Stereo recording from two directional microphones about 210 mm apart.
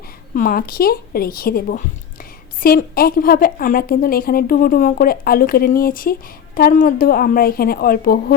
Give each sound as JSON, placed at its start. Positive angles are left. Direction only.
{"t": 0.3, "sound": "a woman's voice", "side_deg": 45}